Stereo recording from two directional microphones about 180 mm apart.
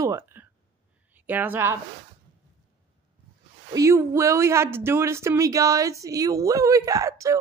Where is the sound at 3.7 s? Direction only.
15° right (ahead or behind).